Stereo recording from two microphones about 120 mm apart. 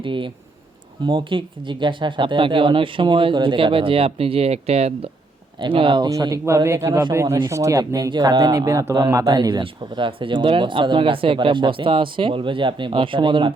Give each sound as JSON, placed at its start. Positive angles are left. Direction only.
{"t": 0.0, "sound": "speech", "side_deg": -45}
{"t": 5.5, "sound": "speech", "side_deg": -45}
{"t": 6.1, "sound": "speech", "side_deg": -25}